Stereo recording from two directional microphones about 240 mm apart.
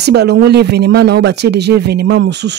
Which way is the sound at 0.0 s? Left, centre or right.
Right.